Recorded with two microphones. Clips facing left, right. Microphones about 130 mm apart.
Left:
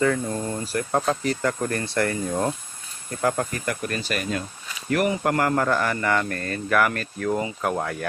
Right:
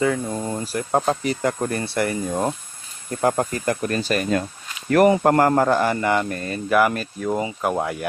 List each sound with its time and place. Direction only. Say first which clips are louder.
0.0 s speech: right 1 dB; 10° right (ahead or behind)
0.9 s speech: right 3 dB; 25° right (ahead or behind)
3.2 s speech: right 3 dB; 30° right (ahead or behind)